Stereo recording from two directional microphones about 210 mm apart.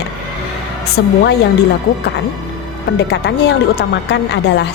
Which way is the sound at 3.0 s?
50° left (ahead or behind).